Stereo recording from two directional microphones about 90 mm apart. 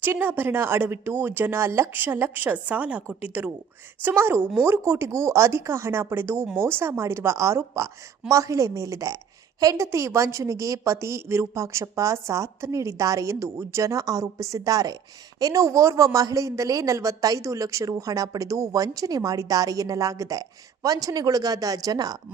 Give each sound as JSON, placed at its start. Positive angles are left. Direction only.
{"t": 0.0, "sound": "a woman's voice", "side_deg": -25}